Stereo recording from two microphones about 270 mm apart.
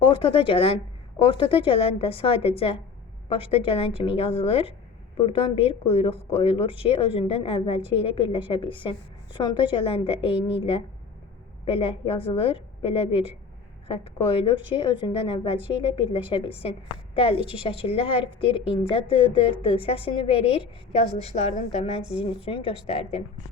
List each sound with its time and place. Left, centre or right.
0.0 s speech: centre